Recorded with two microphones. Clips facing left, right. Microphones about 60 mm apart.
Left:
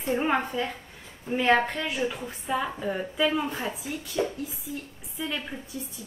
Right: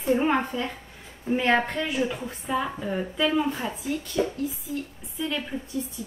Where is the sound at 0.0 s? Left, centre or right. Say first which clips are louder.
Right 3 dB; centre.